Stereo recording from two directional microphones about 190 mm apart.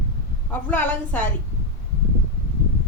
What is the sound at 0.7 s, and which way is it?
Speech, 10° left (ahead or behind).